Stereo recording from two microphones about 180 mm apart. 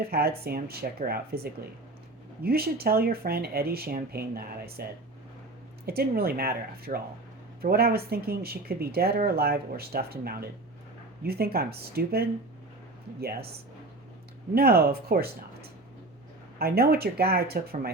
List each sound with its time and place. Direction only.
0.0 s speech: 60° right (ahead or behind)
14.5 s speech: 60° right (ahead or behind)